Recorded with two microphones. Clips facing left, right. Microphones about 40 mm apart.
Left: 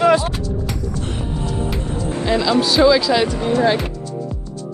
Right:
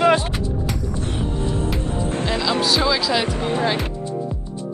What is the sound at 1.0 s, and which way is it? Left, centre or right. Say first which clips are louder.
Music: right 1 dB; left.